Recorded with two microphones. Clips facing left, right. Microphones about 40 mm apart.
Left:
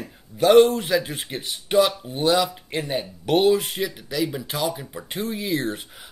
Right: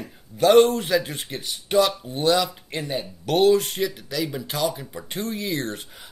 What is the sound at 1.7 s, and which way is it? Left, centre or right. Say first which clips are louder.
Speech: left 1 dB; centre.